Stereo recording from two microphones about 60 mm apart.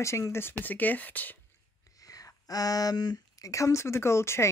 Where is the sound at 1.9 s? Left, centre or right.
Left.